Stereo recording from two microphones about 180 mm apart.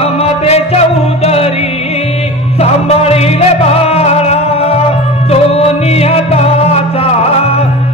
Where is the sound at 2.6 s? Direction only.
35° left (ahead or behind).